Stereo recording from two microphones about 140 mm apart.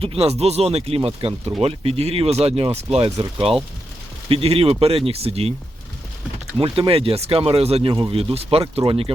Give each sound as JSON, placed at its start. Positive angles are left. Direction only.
{"t": 0.0, "sound": "speech", "side_deg": -45}
{"t": 6.6, "sound": "speech", "side_deg": -40}